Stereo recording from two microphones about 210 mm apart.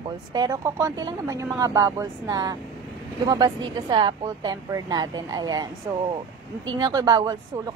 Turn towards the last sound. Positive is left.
turn(degrees=-20)  # may be behind; listen again after turning